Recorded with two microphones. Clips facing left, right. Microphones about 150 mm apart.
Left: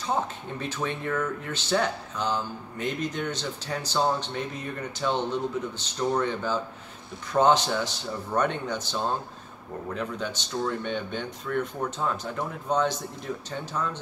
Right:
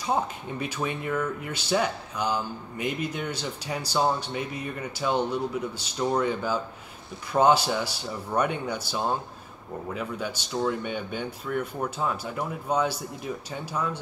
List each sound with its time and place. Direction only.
0.0 s speech: 10° right (ahead or behind)